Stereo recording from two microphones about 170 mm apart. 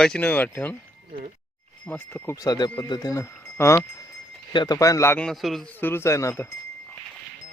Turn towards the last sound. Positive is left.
turn(degrees=15)  # may be behind; listen again after turning